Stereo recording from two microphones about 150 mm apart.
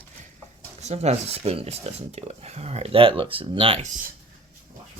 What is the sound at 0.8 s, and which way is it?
Speech, 50° right (ahead or behind).